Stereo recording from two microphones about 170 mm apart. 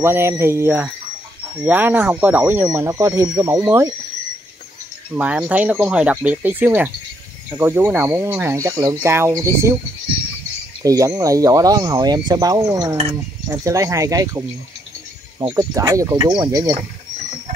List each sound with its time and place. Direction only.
0.0 s speech: 15° right (ahead or behind)
5.1 s speech: 5° right (ahead or behind)
10.8 s speech: 20° right (ahead or behind)